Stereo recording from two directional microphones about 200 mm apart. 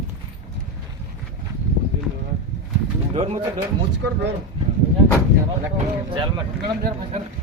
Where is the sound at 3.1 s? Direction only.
30° right (ahead or behind).